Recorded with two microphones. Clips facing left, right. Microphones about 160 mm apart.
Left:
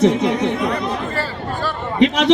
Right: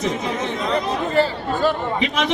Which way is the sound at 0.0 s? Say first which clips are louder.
Left 8 dB; 75° left (ahead or behind).